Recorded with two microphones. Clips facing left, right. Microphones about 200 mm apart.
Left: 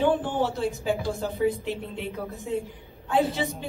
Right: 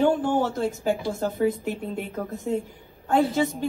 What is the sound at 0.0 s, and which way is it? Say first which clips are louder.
A man's voice: right 2 dB; 45° right (ahead or behind).